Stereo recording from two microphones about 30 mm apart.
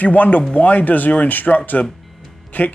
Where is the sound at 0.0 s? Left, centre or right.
Left.